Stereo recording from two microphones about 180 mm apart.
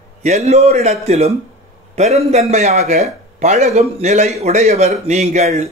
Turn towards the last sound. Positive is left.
turn(degrees=-40)  # may be behind; listen again after turning